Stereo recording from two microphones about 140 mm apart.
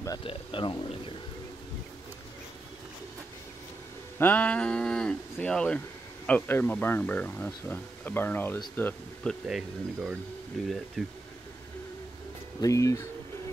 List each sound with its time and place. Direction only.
0.2 s speech: 40° left (ahead or behind)
4.2 s speech: 10° left (ahead or behind)
12.5 s speech: 25° left (ahead or behind)